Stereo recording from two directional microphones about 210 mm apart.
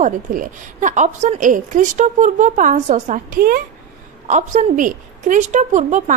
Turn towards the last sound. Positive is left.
turn(degrees=-35)  # may be behind; listen again after turning